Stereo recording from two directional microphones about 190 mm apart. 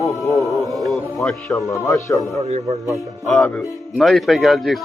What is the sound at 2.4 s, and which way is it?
Speech, 35° right (ahead or behind).